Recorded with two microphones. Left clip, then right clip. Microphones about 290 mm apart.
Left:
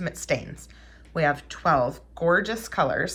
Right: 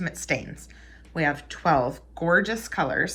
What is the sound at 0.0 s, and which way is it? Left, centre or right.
Speech, centre.